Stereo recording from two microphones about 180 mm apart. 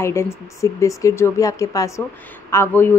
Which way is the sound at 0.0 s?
15° left (ahead or behind).